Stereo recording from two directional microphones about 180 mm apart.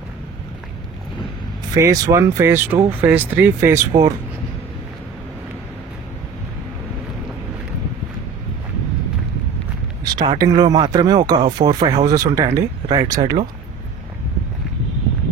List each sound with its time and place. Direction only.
1.7 s speech: 20° right (ahead or behind)
10.0 s speech: 25° right (ahead or behind)